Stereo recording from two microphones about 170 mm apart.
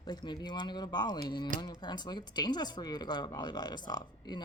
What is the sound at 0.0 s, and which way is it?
Speech, 25° left (ahead or behind).